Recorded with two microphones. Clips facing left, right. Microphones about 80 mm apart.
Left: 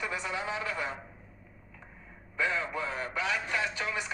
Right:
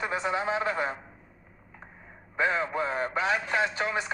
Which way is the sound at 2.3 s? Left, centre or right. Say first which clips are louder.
Right 4 dB; right.